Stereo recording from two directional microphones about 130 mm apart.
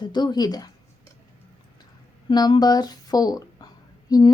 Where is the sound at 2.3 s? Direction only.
30° left (ahead or behind).